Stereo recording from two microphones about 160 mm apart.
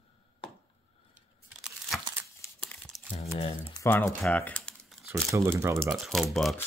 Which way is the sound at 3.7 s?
15° left (ahead or behind).